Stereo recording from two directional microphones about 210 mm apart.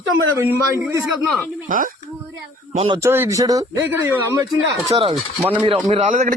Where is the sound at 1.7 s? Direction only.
40° right (ahead or behind).